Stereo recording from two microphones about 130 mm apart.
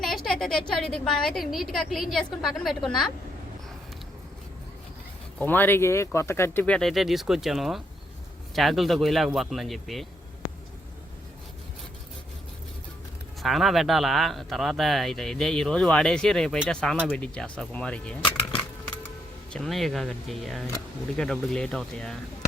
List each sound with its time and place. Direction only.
0.3 s speech: 5° left (ahead or behind)
5.4 s speech: 15° left (ahead or behind)
13.4 s speech: centre (ahead or behind)
19.5 s speech: centre (ahead or behind)